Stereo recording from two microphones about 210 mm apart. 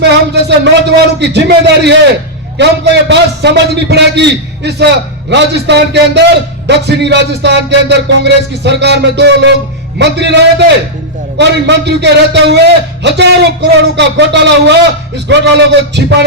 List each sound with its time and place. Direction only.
0.0 s a man's voice: 55° right (ahead or behind)
1.2 s music: 55° right (ahead or behind)
2.6 s a man's voice: 55° right (ahead or behind)
6.7 s music: 55° right (ahead or behind)
11.3 s a man's voice: 55° right (ahead or behind)
15.3 s music: 55° right (ahead or behind)